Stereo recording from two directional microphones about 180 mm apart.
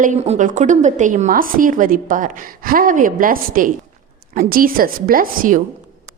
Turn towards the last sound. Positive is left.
turn(degrees=-50)  # may be behind; listen again after turning